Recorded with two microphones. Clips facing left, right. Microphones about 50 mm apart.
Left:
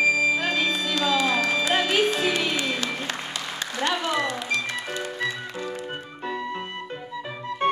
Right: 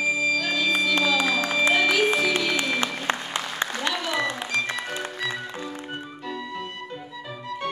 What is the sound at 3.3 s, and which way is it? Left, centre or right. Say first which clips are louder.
Applause: right 3 dB; right.